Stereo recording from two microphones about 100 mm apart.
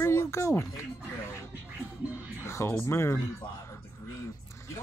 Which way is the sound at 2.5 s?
25° left (ahead or behind).